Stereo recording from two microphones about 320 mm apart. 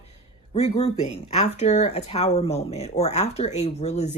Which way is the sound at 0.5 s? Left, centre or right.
Centre.